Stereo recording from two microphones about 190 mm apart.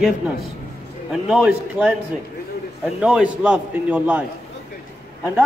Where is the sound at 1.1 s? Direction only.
5° right (ahead or behind).